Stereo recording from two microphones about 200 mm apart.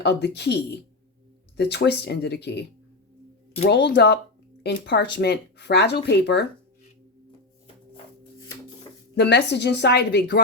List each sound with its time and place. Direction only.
0.0 s speech: 55° left (ahead or behind)
3.7 s speech: 55° left (ahead or behind)
9.1 s speech: 60° left (ahead or behind)